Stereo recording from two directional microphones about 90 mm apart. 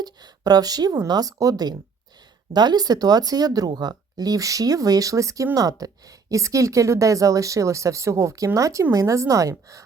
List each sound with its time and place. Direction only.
0.0 s a woman's voice: 50° right (ahead or behind)